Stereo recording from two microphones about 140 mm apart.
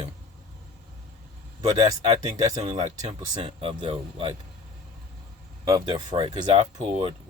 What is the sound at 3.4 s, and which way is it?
Speech, 40° right (ahead or behind).